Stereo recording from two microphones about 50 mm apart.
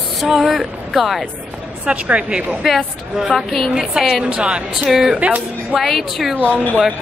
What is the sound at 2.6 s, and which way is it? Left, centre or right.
Speech, centre.